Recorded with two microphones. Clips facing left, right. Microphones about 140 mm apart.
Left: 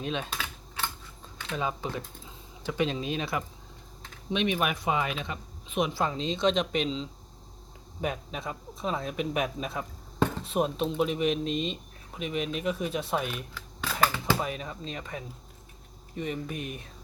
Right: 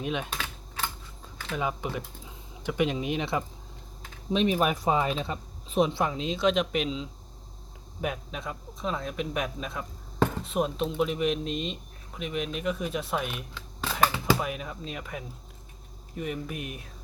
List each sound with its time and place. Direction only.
0.0 s speech: 15° right (ahead or behind)
1.4 s a sound: centre (ahead or behind)
1.6 s speech: 10° right (ahead or behind)
4.3 s speech: 35° right (ahead or behind)
6.1 s speech: 5° right (ahead or behind)
13.8 s a sound: 20° right (ahead or behind)
14.3 s speech: 5° right (ahead or behind)